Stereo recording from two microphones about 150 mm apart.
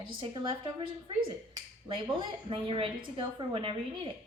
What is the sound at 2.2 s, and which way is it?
Speech, 35° right (ahead or behind).